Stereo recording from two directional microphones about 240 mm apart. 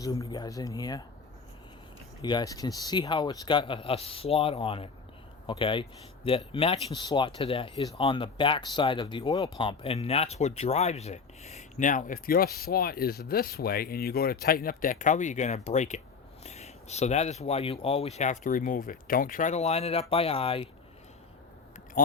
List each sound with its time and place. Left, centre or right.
0.0 s speech: centre
2.2 s speech: centre